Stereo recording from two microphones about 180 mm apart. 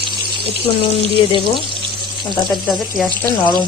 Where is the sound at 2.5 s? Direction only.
Centre (ahead or behind).